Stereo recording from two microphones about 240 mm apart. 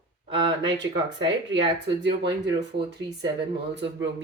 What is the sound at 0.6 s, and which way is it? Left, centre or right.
Speech, right.